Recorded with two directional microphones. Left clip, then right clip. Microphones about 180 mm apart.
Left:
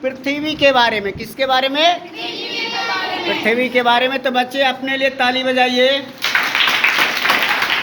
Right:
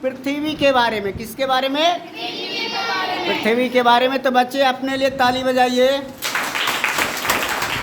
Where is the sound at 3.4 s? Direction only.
30° right (ahead or behind); by 5.7 s 10° right (ahead or behind).